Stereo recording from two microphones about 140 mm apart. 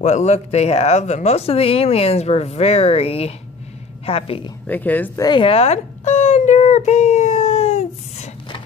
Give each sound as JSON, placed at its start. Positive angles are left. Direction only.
{"t": 0.0, "sound": "speech", "side_deg": 55}
{"t": 4.6, "sound": "speech", "side_deg": 10}
{"t": 5.2, "sound": "a sound", "side_deg": 35}